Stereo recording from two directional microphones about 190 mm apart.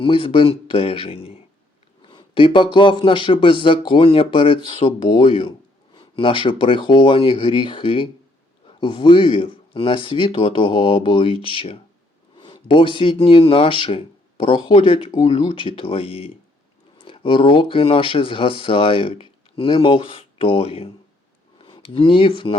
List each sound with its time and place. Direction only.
0.0 s speech: 30° left (ahead or behind)
2.0 s a sound: 25° left (ahead or behind)
3.0 s speech: 25° left (ahead or behind)